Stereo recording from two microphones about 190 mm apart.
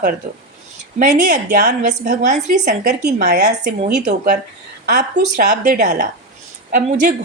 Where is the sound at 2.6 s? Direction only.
60° right (ahead or behind).